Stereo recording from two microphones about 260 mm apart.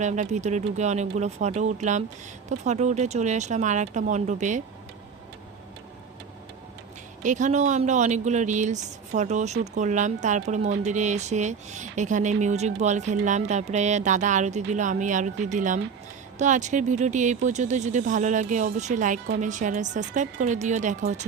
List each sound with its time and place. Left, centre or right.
0.0 s speech: right
7.2 s speech: right